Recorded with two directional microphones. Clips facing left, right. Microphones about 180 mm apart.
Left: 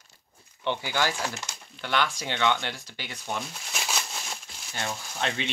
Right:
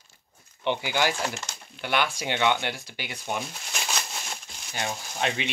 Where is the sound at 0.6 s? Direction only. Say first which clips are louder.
Right 2 dB; 15° right (ahead or behind).